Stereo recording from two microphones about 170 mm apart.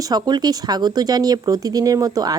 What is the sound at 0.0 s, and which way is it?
Speech, 25° right (ahead or behind).